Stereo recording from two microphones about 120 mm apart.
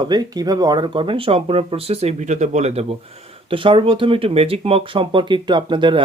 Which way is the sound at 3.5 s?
45° right (ahead or behind).